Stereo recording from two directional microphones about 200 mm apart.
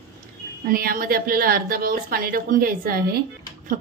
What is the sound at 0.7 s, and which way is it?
A woman's voice, 45° right (ahead or behind).